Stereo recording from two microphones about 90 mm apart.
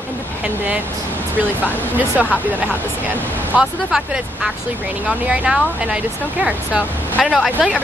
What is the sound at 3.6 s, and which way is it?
Speech, 5° right (ahead or behind).